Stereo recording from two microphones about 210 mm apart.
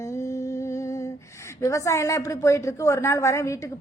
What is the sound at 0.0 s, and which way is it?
Speech, 15° left (ahead or behind).